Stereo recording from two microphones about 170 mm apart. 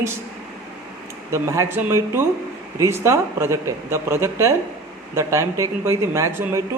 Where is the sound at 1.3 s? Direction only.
15° right (ahead or behind).